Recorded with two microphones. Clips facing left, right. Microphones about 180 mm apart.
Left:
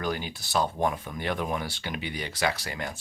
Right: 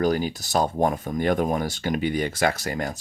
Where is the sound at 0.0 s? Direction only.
40° right (ahead or behind).